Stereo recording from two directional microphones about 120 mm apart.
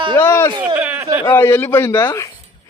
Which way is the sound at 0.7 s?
15° right (ahead or behind).